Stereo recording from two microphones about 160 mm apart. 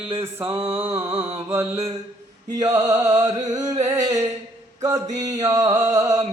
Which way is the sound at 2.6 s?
25° right (ahead or behind).